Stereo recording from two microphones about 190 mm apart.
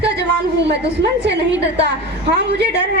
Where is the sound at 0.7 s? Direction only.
65° right (ahead or behind).